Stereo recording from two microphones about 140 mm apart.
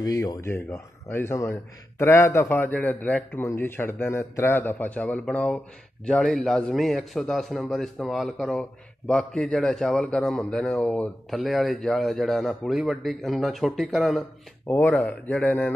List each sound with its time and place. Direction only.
0.0 s a man's voice: 25° left (ahead or behind); by 14.2 s centre (ahead or behind)
14.7 s speech: 15° left (ahead or behind)